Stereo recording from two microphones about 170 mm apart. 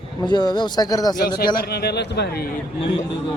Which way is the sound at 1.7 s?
75° left (ahead or behind).